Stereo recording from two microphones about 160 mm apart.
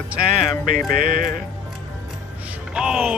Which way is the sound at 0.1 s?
5° right (ahead or behind).